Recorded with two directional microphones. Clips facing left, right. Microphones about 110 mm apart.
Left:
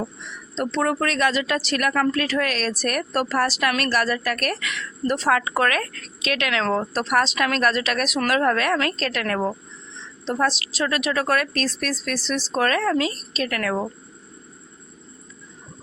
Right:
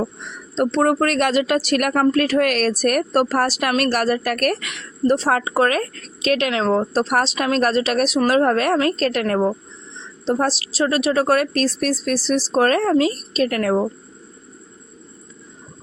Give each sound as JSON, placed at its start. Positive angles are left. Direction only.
{"t": 0.5, "sound": "speech", "side_deg": -45}
{"t": 5.1, "sound": "speech", "side_deg": -30}
{"t": 6.5, "sound": "speech", "side_deg": -25}
{"t": 9.2, "sound": "speech", "side_deg": -25}